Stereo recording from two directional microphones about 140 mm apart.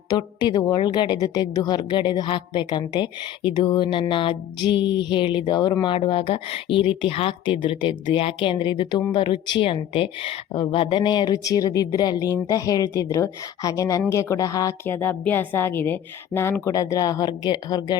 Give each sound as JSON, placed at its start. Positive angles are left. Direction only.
{"t": 0.1, "sound": "a woman's voice", "side_deg": 30}